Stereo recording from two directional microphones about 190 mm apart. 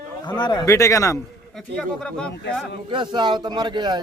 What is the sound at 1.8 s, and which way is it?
Speech, 5° left (ahead or behind).